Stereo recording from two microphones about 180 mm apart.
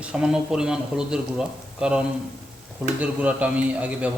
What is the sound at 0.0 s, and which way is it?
A man's voice, 5° right (ahead or behind).